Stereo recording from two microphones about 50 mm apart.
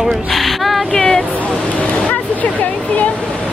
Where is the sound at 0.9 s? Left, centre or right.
Left.